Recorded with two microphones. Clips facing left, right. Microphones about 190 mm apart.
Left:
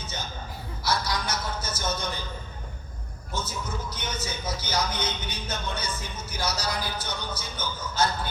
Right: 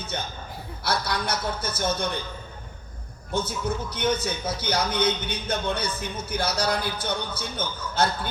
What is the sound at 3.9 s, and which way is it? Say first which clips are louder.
Speech: right 8 dB; 60° right (ahead or behind).